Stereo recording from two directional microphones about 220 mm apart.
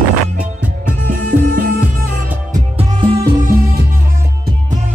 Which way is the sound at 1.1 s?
40° right (ahead or behind).